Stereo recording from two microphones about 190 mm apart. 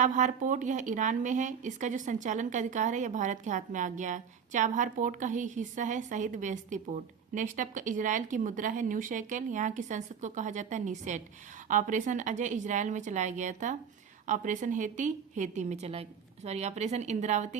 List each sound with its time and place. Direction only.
0.0 s speech: 40° right (ahead or behind)